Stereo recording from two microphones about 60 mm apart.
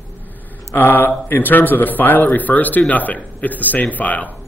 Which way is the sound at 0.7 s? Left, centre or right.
Left.